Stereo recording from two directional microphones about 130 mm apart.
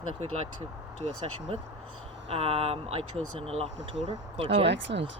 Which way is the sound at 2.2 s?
50° right (ahead or behind).